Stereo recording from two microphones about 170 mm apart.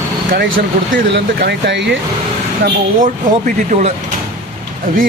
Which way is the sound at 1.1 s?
80° right.